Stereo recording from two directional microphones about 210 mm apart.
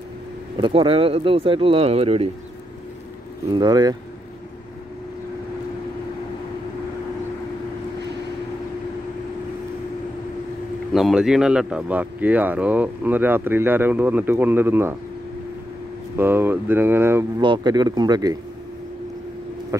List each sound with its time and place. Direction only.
0.6 s speech: 25° right (ahead or behind)
3.5 s speech: 20° right (ahead or behind)
10.9 s speech: centre (ahead or behind)
16.2 s speech: 10° right (ahead or behind)
17.4 s speech: 20° right (ahead or behind)
19.7 s speech: 15° right (ahead or behind)